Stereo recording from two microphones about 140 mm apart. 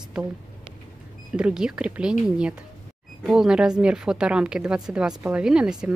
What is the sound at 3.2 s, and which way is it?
Speech, 5° right (ahead or behind).